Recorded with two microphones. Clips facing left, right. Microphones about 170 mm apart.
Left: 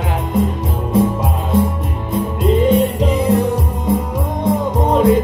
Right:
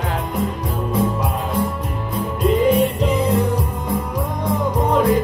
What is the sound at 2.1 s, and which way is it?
Music, 25° left (ahead or behind).